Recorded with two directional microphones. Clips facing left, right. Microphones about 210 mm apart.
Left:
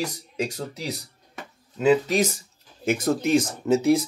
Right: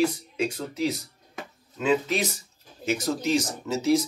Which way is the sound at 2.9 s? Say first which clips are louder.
Left 4 dB; 55° left (ahead or behind).